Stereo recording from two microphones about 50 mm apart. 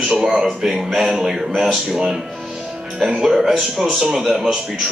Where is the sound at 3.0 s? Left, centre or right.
Centre.